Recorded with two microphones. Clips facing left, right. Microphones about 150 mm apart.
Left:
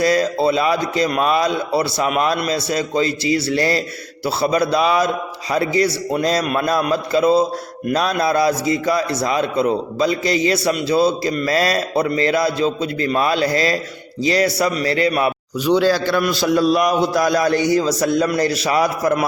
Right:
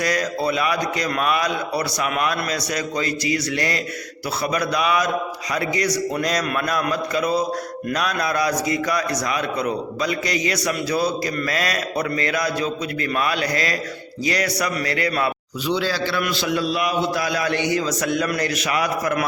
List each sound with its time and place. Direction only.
0.0 s a man's voice: 25° left (ahead or behind)
15.6 s a man's voice: 45° left (ahead or behind)